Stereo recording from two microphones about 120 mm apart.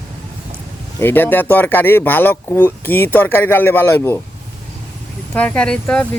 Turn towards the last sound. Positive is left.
turn(degrees=5)  # may be behind; listen again after turning